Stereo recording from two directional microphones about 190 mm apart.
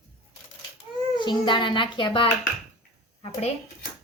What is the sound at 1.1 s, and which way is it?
A woman's voice, 25° left (ahead or behind).